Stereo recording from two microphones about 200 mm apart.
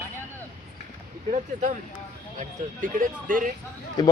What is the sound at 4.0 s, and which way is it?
Speech, 20° left (ahead or behind).